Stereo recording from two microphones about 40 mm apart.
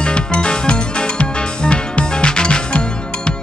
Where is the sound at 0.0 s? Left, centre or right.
Left.